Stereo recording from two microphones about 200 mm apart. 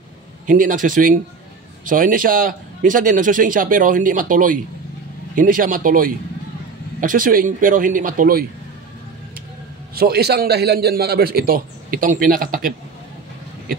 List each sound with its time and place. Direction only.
0.5 s a man's voice: 40° right (ahead or behind)
9.9 s a man's voice: 50° right (ahead or behind)